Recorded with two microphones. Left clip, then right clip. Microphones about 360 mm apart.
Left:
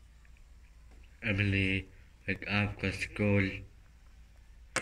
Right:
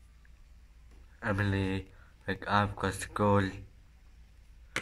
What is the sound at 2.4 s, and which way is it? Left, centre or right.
Speech, right.